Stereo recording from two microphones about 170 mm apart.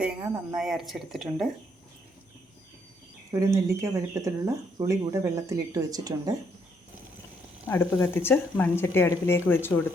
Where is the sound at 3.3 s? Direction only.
20° right (ahead or behind).